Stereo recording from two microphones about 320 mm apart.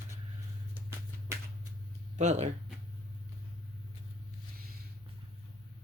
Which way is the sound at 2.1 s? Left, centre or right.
Right.